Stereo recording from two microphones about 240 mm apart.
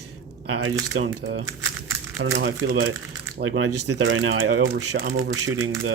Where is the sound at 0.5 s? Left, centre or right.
Right.